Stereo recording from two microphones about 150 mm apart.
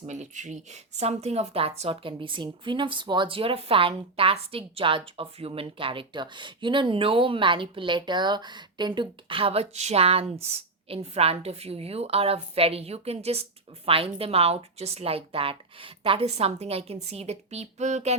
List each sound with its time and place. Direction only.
0.1 s a woman's voice: 55° right (ahead or behind)